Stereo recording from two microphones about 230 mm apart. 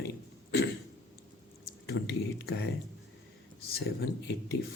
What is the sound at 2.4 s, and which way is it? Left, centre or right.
Speech, left.